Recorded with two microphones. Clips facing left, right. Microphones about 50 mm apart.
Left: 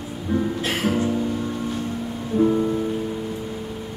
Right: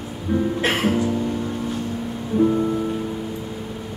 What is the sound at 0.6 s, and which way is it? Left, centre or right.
Music, right.